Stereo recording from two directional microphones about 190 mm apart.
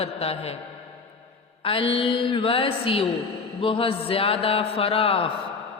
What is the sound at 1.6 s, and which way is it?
A man's voice, 30° left (ahead or behind).